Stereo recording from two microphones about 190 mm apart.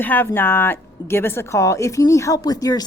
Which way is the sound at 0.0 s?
10° left (ahead or behind).